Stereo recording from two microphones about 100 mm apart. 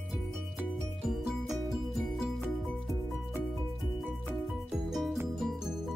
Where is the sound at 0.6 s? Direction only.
5° right (ahead or behind).